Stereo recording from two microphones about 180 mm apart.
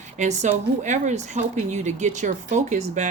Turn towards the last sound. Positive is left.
turn(degrees=-40)  # may be behind; listen again after turning